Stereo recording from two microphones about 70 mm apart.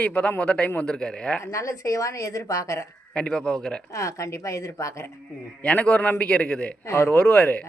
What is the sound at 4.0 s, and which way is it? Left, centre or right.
Speech, left.